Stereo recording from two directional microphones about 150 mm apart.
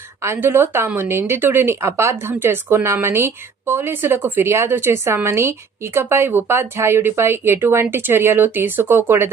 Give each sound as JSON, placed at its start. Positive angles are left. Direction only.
{"t": 0.2, "sound": "speech", "side_deg": -15}